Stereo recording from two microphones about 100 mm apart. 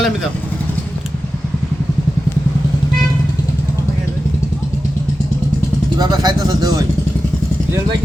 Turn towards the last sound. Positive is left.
turn(degrees=-40)  # may be behind; listen again after turning